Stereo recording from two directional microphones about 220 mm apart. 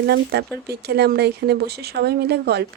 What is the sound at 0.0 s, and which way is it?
Speech, 50° right (ahead or behind).